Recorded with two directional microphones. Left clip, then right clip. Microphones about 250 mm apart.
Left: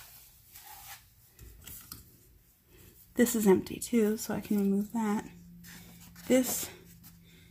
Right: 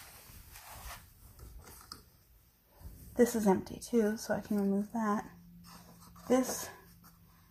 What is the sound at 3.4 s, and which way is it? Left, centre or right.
Speech, centre.